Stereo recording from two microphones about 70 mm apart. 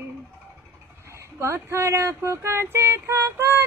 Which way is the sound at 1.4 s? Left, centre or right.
Right.